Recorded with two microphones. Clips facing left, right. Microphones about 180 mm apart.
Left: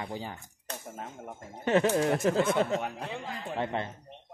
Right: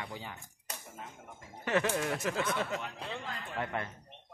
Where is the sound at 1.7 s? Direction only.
30° left (ahead or behind).